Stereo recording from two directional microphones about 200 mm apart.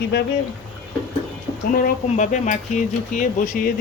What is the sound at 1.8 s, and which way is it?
Speech, 40° left (ahead or behind).